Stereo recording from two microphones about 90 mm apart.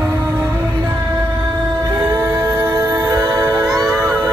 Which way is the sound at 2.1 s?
35° right (ahead or behind).